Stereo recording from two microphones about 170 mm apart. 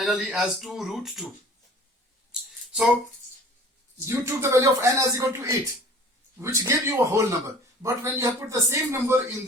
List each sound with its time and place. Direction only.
0.0 s speech: centre (ahead or behind)
4.0 s a man's voice: 15° right (ahead or behind)